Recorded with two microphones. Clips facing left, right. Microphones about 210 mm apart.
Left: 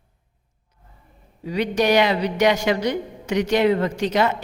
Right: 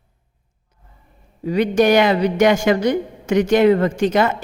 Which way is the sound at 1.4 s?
50° right (ahead or behind).